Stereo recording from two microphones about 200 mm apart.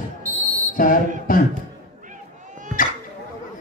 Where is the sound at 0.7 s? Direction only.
45° left (ahead or behind).